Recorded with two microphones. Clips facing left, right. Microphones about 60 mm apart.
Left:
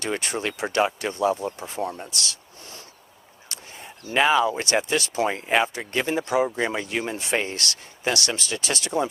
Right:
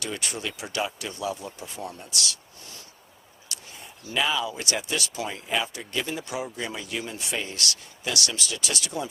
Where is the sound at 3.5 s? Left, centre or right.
Left.